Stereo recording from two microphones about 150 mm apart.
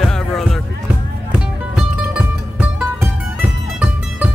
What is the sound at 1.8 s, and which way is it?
Music, 10° right (ahead or behind).